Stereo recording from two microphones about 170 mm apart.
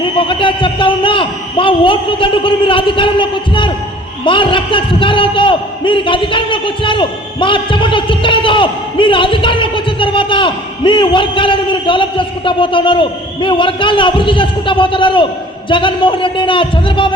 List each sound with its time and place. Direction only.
0.0 s a man's voice: 30° left (ahead or behind)